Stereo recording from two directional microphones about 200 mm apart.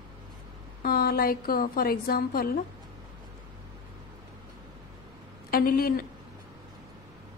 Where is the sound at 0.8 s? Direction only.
50° left (ahead or behind).